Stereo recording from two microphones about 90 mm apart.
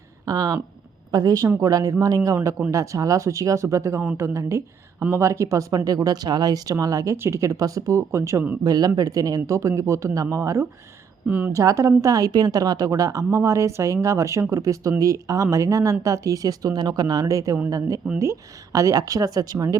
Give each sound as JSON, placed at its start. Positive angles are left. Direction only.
{"t": 0.3, "sound": "speech", "side_deg": -40}
{"t": 8.6, "sound": "speech", "side_deg": -45}
{"t": 11.3, "sound": "a woman's voice", "side_deg": -20}
{"t": 11.5, "sound": "speech", "side_deg": -40}